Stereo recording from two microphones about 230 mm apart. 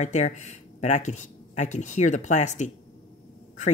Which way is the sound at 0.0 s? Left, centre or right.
Left.